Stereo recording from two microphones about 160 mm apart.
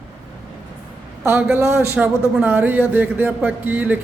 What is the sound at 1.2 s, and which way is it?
A man's voice, 15° right (ahead or behind).